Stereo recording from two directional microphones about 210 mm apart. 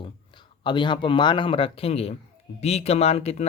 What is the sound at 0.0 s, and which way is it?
Speech, 20° left (ahead or behind).